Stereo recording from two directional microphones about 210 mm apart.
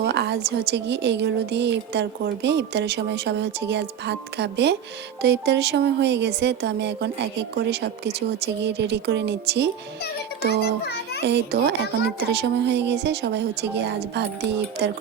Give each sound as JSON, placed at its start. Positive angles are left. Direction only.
{"t": 0.0, "sound": "a woman's voice", "side_deg": -55}